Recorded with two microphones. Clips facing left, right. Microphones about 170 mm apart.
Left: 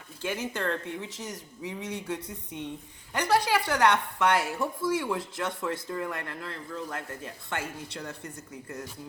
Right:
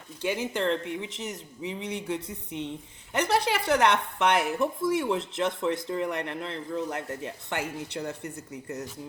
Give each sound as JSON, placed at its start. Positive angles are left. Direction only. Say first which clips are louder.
{"t": 0.2, "sound": "a woman's voice", "louder": "right 3 dB", "side_deg": -20}